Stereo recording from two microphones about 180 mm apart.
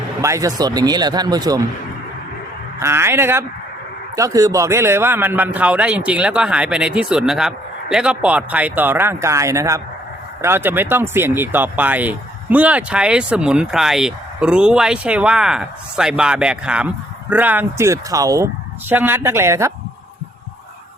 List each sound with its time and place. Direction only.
0.2 s speech: 15° right (ahead or behind)
2.7 s speech: 15° right (ahead or behind)